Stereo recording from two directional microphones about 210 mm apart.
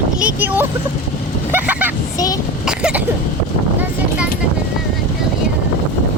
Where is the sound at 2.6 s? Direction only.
5° right (ahead or behind).